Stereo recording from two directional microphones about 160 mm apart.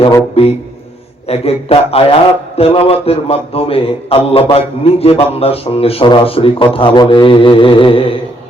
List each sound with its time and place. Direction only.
1.3 s a man's voice: 40° left (ahead or behind)